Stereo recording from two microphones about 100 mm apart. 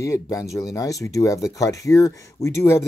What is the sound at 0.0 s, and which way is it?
Speech, 35° left (ahead or behind).